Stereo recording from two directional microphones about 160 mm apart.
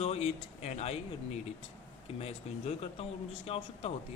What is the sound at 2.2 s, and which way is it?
A man's voice, 40° left (ahead or behind).